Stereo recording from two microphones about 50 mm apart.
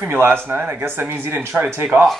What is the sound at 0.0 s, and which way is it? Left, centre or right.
Speech, right.